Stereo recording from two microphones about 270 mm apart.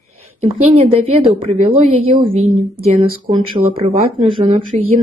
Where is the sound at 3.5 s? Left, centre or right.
Right.